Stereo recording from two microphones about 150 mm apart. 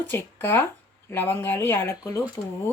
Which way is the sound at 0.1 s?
15° left (ahead or behind).